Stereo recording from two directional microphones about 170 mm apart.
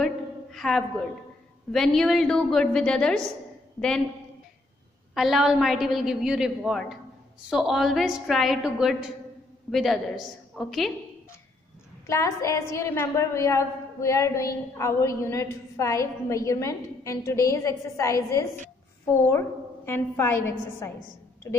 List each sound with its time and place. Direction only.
0.0 s a sound: centre (ahead or behind)
1.7 s a woman's voice: centre (ahead or behind)
5.1 s a woman's voice: centre (ahead or behind)
12.1 s a woman's voice: 20° left (ahead or behind)